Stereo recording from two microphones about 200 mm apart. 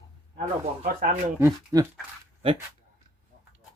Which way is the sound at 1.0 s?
35° right (ahead or behind).